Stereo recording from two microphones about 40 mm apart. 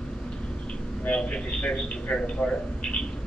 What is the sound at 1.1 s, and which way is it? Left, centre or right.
A man's voice, left.